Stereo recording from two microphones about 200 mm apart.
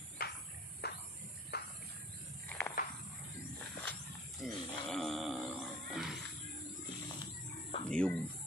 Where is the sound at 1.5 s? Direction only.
55° left (ahead or behind).